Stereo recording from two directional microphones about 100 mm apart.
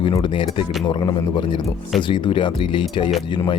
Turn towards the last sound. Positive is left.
turn(degrees=55)  # may be behind; listen again after turning